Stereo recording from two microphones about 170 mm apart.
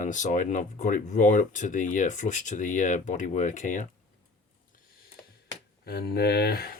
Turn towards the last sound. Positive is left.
turn(degrees=60)  # may be behind; listen again after turning